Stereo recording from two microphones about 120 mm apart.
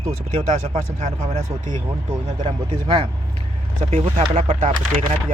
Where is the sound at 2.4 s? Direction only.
40° right (ahead or behind).